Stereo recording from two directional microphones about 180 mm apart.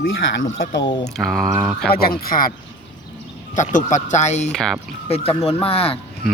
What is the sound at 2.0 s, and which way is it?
Speech, 55° left (ahead or behind).